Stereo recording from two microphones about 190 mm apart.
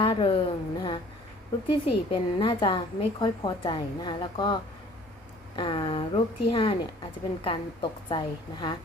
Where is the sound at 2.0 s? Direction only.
25° left (ahead or behind).